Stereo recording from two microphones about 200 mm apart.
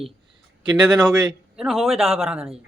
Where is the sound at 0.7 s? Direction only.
20° right (ahead or behind).